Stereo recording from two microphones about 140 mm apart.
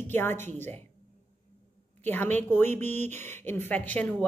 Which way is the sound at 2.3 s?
15° left (ahead or behind).